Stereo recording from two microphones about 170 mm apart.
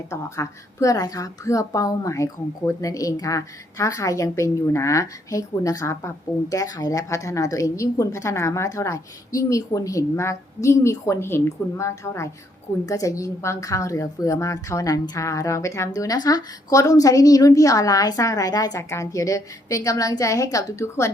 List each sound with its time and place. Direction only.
0.1 s a woman's voice: 20° left (ahead or behind)